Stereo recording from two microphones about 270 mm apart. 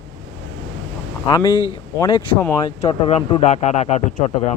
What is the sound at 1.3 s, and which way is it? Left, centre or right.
A man's voice, centre.